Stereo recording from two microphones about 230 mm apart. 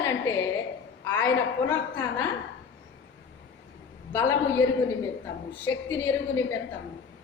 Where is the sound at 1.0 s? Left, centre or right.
Centre.